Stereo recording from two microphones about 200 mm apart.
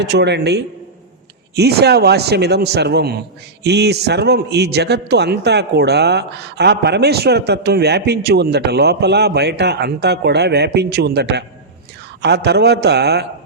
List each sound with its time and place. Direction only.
0.0 s a man's voice: 55° right (ahead or behind)